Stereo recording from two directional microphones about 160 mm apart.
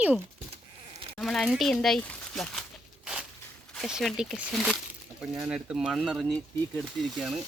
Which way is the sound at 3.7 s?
Centre (ahead or behind).